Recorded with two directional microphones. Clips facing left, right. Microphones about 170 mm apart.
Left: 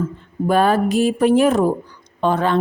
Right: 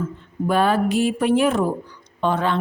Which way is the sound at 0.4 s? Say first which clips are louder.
Left 3 dB; 45° left (ahead or behind).